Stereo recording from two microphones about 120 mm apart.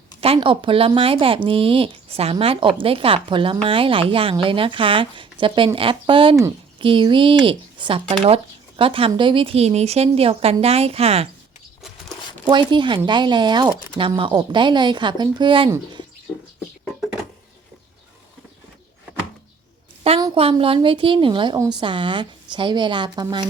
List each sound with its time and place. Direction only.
0.3 s a woman's voice: 45° right (ahead or behind)
12.5 s speech: 40° right (ahead or behind)
20.3 s a woman's voice: 50° right (ahead or behind)